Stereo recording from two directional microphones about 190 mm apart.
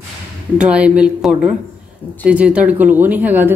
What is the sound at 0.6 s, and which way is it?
Speech, 5° right (ahead or behind).